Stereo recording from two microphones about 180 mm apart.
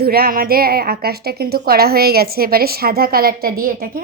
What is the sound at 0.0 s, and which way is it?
A woman's voice, 55° right (ahead or behind).